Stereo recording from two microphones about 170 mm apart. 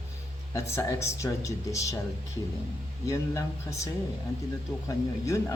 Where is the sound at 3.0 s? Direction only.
20° left (ahead or behind).